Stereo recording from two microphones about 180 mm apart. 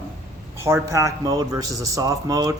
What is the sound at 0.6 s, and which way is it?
A man's voice, 15° right (ahead or behind).